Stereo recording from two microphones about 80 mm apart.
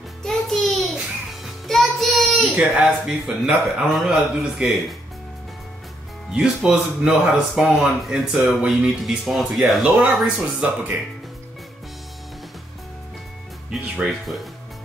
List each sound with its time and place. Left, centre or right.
0.2 s music: centre
2.5 s speech: centre
3.3 s speech: centre
6.3 s speech: centre
13.7 s speech: centre